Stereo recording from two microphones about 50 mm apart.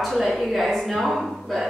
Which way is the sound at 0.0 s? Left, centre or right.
Centre.